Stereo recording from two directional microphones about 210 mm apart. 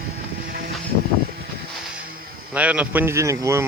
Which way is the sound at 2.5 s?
5° right (ahead or behind).